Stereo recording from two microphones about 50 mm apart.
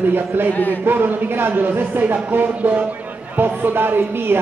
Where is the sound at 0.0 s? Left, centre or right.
Right.